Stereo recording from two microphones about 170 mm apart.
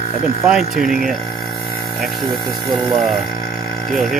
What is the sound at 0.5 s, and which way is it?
Speech, centre (ahead or behind).